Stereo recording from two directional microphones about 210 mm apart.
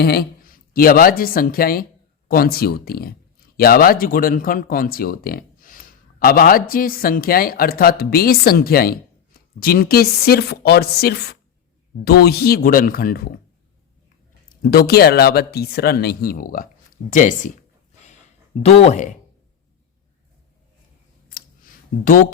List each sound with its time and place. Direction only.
0.0 s speech: 45° left (ahead or behind)
14.5 s speech: 45° left (ahead or behind)
18.6 s speech: 30° left (ahead or behind)
22.0 s speech: 40° left (ahead or behind)